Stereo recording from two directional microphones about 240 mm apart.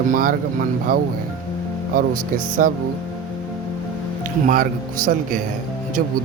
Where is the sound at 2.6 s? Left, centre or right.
Right.